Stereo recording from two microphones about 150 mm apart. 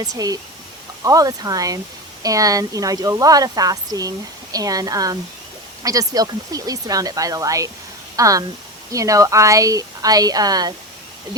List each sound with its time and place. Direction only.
0.0 s a woman's voice: 25° right (ahead or behind)